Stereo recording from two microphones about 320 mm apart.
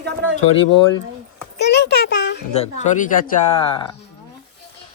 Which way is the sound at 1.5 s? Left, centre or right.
Left.